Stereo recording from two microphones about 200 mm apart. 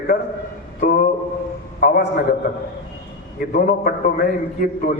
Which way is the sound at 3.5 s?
45° left (ahead or behind).